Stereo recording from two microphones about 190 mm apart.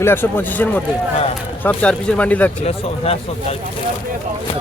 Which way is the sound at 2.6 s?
35° left (ahead or behind).